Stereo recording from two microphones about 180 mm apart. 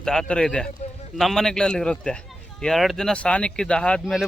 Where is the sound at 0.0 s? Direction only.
5° left (ahead or behind).